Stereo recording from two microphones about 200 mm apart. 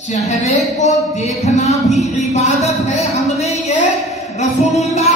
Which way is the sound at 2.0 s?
35° left (ahead or behind).